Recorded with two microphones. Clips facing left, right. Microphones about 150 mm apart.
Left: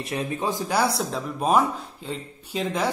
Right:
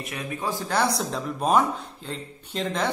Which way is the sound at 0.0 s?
30° left (ahead or behind).